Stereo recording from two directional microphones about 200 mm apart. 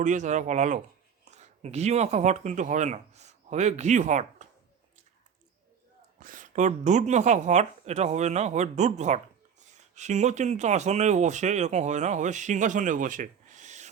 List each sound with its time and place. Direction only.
0.0 s speech: 40° right (ahead or behind)
6.1 s speech: 40° right (ahead or behind)